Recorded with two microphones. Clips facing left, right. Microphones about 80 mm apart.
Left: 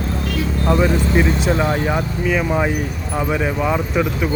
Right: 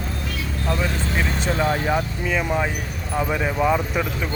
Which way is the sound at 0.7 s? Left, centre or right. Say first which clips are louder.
Left 8 dB; centre.